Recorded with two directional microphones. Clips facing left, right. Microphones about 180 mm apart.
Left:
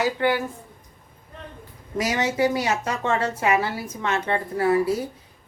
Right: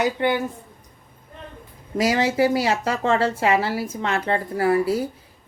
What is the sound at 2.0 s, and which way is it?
A woman's voice, 30° right (ahead or behind).